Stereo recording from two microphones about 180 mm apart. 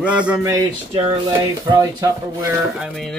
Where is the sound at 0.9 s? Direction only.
30° right (ahead or behind).